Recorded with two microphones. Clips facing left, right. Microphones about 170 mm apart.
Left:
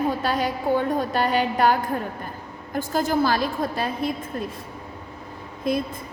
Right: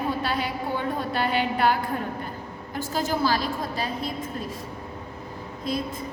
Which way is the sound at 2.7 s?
50° left (ahead or behind).